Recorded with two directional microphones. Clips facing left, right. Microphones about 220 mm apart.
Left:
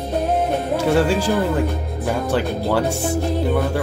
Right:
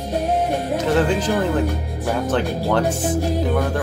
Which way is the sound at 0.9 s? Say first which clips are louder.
Left 1 dB; 10° left (ahead or behind).